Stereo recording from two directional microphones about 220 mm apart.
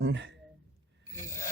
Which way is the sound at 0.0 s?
55° right (ahead or behind).